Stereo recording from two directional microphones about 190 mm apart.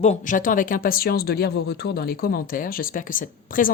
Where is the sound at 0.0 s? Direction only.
40° left (ahead or behind).